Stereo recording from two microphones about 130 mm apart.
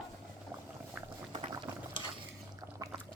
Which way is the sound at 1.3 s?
40° right (ahead or behind).